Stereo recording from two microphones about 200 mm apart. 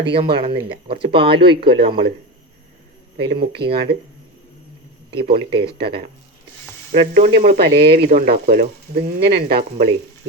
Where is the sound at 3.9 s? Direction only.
55° right (ahead or behind).